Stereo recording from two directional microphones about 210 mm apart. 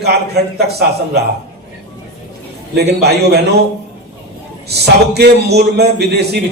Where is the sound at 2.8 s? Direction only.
50° right (ahead or behind).